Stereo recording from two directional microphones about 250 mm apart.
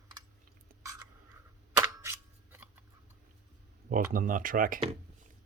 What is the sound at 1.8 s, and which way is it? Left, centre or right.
Scissors, centre.